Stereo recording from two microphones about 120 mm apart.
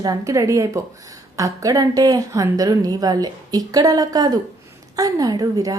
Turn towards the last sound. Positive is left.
turn(degrees=-30)  # may be behind; listen again after turning